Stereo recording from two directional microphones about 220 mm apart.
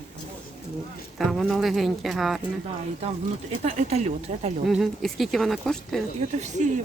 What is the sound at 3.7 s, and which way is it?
Speech, 30° right (ahead or behind).